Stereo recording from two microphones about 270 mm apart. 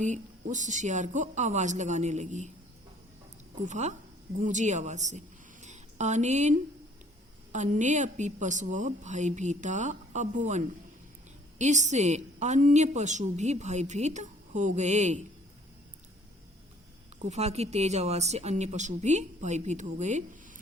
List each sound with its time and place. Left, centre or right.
0.0 s a woman's voice: right
3.7 s a woman's voice: right
17.2 s a woman's voice: right